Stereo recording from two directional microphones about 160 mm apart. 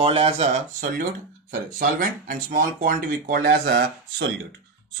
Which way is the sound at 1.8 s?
60° right (ahead or behind).